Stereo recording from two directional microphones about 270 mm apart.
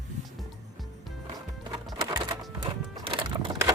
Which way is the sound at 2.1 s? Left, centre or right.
Centre.